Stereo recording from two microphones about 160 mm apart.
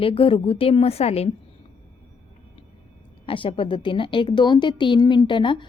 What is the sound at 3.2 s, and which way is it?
A woman's voice, 35° left (ahead or behind).